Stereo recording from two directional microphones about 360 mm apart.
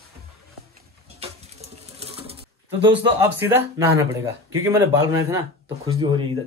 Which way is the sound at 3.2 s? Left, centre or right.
Centre.